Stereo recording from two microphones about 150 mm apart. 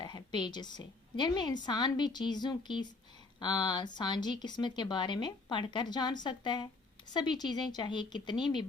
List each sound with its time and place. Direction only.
0.0 s a woman's voice: 30° left (ahead or behind)